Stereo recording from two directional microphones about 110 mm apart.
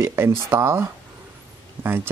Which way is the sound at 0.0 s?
20° right (ahead or behind).